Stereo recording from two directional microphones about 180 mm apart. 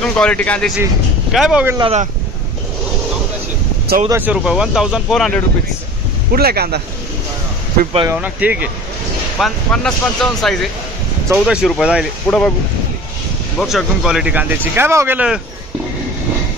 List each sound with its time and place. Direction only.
0.0 s speech: 5° left (ahead or behind)
1.8 s speech: 35° right (ahead or behind)
4.1 s speech: 10° right (ahead or behind)
6.3 s speech: 60° right (ahead or behind)
8.1 s speech: 10° right (ahead or behind)
9.4 s speech: 5° left (ahead or behind)
12.3 s speech: 5° left (ahead or behind)
13.6 s speech: centre (ahead or behind)